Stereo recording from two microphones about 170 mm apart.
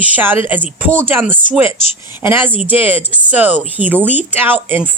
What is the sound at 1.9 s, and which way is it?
Speech, 35° left (ahead or behind).